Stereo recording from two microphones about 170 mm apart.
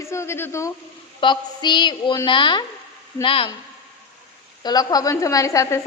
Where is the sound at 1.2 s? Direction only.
25° left (ahead or behind).